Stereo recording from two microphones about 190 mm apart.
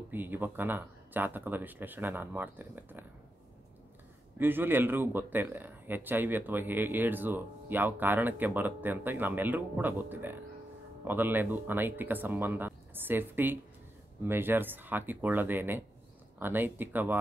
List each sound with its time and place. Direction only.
0.1 s speech: 10° right (ahead or behind)
4.4 s speech: 10° right (ahead or behind)